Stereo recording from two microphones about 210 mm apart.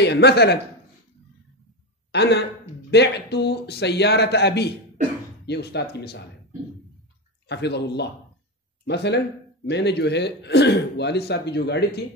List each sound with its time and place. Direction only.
0.0 s speech: 50° left (ahead or behind)
2.1 s speech: 55° left (ahead or behind)
7.4 s speech: 55° left (ahead or behind)